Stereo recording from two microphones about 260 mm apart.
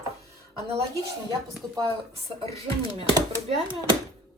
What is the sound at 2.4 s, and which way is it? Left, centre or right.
Speech, right.